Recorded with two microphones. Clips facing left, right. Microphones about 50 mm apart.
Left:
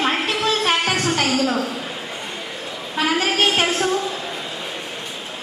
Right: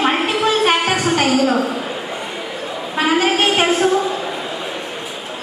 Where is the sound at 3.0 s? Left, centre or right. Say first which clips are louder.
Right 3 dB; centre.